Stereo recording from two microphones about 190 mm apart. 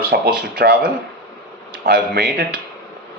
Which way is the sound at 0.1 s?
55° right (ahead or behind).